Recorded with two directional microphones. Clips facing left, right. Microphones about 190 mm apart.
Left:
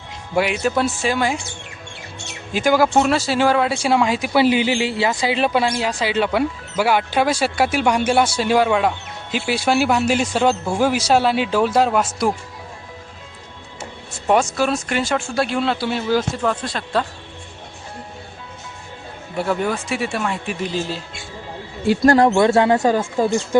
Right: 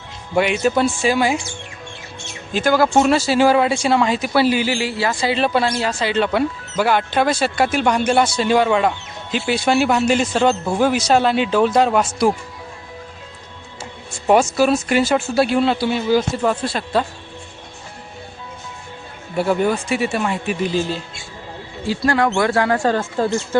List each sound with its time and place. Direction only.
0.3 s speech: centre (ahead or behind)
2.5 s speech: 10° left (ahead or behind)
2.9 s speech: centre (ahead or behind)
3.8 s speech: 10° left (ahead or behind)
14.1 s speech: 5° right (ahead or behind)
19.4 s speech: centre (ahead or behind)
21.8 s speech: 45° left (ahead or behind)
22.4 s speech: 25° left (ahead or behind)
22.8 s speech: 10° left (ahead or behind)